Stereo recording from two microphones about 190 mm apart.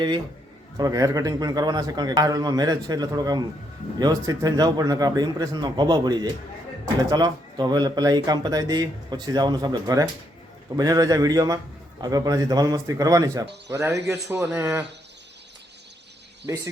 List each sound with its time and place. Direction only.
0.8 s speech: 20° right (ahead or behind)